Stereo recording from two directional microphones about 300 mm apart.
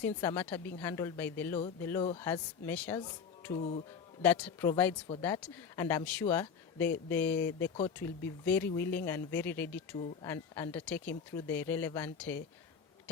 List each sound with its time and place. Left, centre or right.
0.0 s speech: centre
4.2 s speech: centre